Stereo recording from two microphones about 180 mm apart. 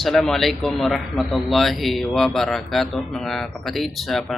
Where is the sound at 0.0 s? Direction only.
Centre (ahead or behind).